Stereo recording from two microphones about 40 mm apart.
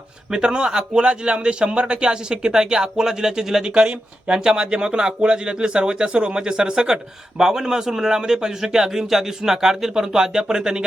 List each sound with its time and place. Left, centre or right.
0.3 s speech: centre